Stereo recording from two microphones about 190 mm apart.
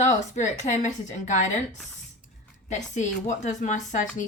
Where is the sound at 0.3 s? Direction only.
40° left (ahead or behind).